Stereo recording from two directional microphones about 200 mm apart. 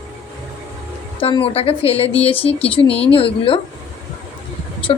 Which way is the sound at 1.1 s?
25° left (ahead or behind).